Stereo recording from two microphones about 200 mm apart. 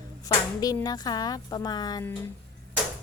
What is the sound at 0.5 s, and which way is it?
Speech, 20° left (ahead or behind).